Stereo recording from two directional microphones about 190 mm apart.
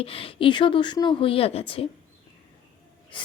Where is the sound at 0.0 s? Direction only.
30° left (ahead or behind).